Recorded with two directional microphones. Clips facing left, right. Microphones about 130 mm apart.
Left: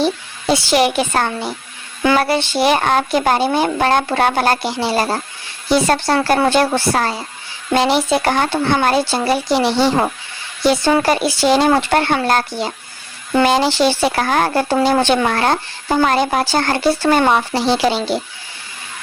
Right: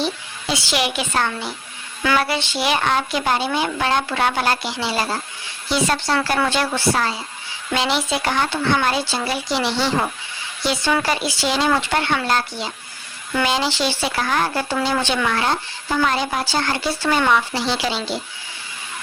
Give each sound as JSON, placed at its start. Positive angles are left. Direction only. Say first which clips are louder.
{"t": 0.0, "sound": "speech", "louder": "left 7 dB", "side_deg": 45}